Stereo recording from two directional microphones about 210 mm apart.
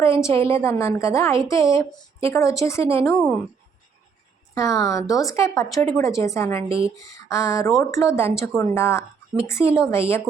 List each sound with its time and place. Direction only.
0.3 s a woman's voice: 15° left (ahead or behind)
4.5 s a woman's voice: 15° left (ahead or behind)
6.7 s speech: 25° right (ahead or behind)
6.9 s a woman's voice: 15° left (ahead or behind)